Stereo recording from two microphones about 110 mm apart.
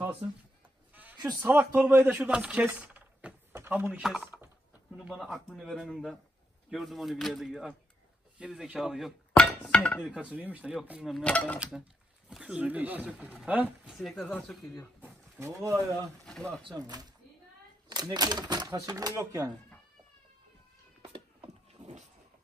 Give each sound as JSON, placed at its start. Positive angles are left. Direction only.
{"t": 1.4, "sound": "speech", "side_deg": -20}
{"t": 4.0, "sound": "speech", "side_deg": -5}
{"t": 5.8, "sound": "speech", "side_deg": -5}
{"t": 9.3, "sound": "a sound", "side_deg": 10}
{"t": 10.0, "sound": "speech", "side_deg": -10}
{"t": 11.2, "sound": "speech", "side_deg": 10}
{"t": 12.3, "sound": "speech", "side_deg": -5}
{"t": 13.9, "sound": "speech", "side_deg": 0}
{"t": 15.0, "sound": "a sound", "side_deg": -20}
{"t": 16.6, "sound": "speech", "side_deg": -35}